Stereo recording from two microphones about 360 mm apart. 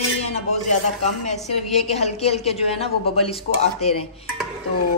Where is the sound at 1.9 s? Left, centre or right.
Centre.